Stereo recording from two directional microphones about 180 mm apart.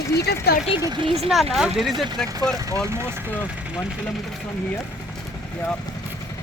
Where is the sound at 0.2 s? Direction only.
60° left (ahead or behind).